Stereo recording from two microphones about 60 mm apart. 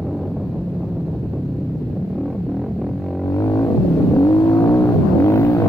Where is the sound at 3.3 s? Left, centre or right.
Left.